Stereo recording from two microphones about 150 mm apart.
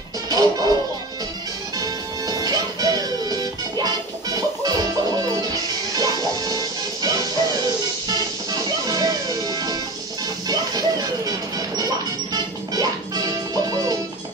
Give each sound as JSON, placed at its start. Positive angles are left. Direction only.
{"t": 0.3, "sound": "music", "side_deg": -25}
{"t": 1.8, "sound": "music", "side_deg": -25}
{"t": 8.5, "sound": "music", "side_deg": -25}